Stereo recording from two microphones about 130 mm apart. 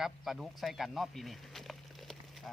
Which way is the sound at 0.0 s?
Centre (ahead or behind).